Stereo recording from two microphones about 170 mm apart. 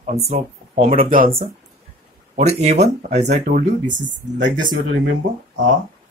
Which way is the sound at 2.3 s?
40° right (ahead or behind).